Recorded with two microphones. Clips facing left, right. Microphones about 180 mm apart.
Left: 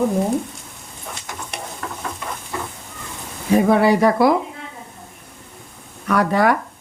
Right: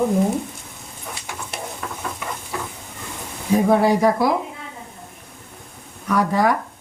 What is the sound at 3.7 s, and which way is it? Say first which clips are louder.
Speech: even; 70° left (ahead or behind).